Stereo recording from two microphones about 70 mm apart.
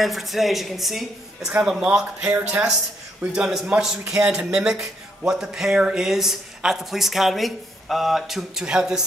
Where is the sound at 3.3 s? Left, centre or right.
Centre.